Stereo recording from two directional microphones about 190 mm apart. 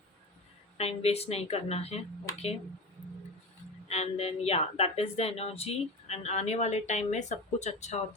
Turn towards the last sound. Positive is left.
turn(degrees=35)  # may be behind; listen again after turning